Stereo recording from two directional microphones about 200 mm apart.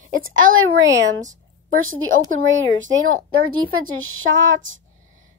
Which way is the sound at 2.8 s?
80° right.